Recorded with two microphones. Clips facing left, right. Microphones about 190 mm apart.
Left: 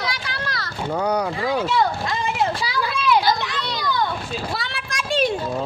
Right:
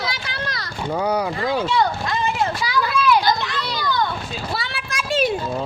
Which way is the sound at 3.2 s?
Centre (ahead or behind).